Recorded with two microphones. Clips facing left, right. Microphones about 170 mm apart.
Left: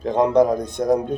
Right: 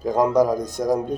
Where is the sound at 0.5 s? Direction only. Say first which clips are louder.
Left 1 dB; 60° left (ahead or behind).